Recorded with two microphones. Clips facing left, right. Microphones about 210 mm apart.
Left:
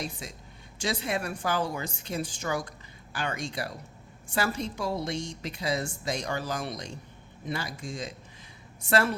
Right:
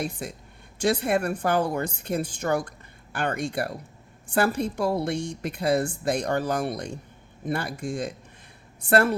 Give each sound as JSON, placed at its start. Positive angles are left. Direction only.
{"t": 0.0, "sound": "a woman's voice", "side_deg": -55}